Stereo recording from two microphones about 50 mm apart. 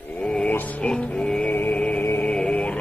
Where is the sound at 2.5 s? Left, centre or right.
Left.